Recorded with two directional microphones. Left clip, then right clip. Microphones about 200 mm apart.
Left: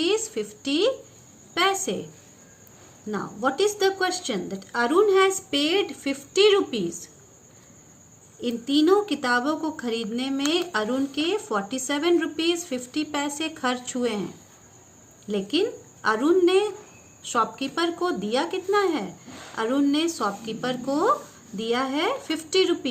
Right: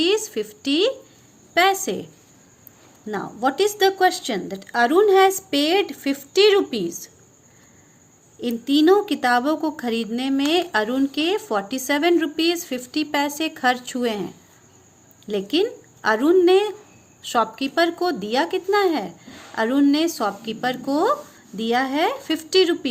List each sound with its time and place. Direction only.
0.0 s a woman's voice: 40° right (ahead or behind)
3.1 s speech: 45° right (ahead or behind)
8.4 s a woman's voice: 45° right (ahead or behind)
15.3 s a woman's voice: 45° right (ahead or behind)